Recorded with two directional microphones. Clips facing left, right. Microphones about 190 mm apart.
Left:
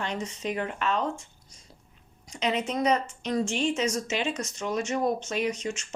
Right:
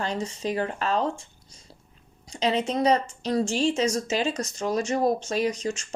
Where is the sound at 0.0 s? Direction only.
35° right (ahead or behind).